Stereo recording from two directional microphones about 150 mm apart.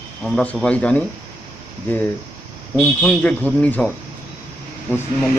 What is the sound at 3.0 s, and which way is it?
Speech, 10° left (ahead or behind).